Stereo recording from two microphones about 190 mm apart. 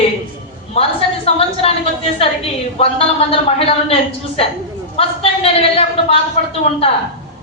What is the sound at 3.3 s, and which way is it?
Speech, 30° left (ahead or behind).